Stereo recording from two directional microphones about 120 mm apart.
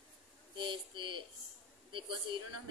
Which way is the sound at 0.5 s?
40° right (ahead or behind).